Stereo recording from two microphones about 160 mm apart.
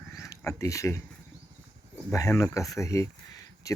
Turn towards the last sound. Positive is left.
turn(degrees=20)  # may be behind; listen again after turning